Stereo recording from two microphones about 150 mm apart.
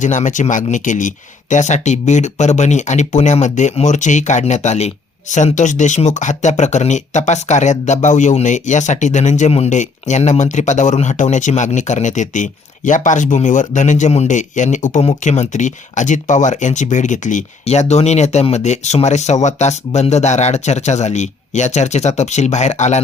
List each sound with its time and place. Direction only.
0.0 s speech: 55° left (ahead or behind)